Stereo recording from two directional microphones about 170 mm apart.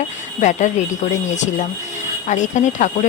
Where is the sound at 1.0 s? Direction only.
45° left (ahead or behind).